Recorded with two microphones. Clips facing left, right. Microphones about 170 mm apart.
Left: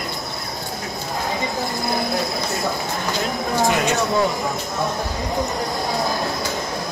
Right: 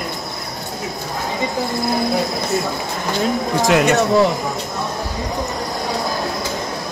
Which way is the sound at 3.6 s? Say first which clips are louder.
Right 5 dB; 65° right (ahead or behind).